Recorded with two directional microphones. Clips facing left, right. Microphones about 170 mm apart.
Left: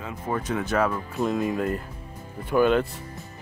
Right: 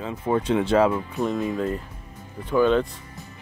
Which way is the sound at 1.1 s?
5° left (ahead or behind).